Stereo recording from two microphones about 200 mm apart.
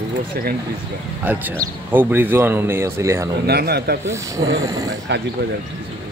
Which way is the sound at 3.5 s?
50° right (ahead or behind).